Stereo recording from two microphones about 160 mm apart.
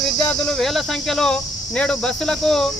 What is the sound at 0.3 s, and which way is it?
Speech, 5° left (ahead or behind).